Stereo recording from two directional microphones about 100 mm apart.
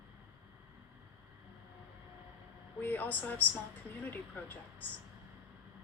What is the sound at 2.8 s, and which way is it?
Speech, 20° left (ahead or behind).